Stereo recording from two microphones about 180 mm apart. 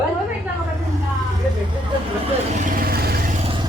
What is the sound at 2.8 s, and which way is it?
Vehicle, 55° right (ahead or behind).